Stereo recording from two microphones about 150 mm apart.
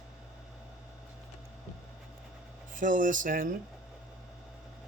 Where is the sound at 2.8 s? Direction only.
60° right (ahead or behind).